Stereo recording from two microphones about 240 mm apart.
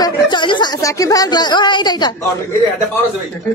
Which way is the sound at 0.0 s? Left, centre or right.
Centre.